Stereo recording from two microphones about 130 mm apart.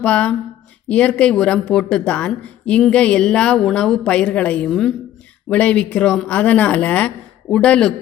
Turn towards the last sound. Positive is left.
turn(degrees=5)  # may be behind; listen again after turning